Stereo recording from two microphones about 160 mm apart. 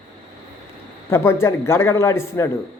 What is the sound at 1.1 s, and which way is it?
Speech, 15° left (ahead or behind).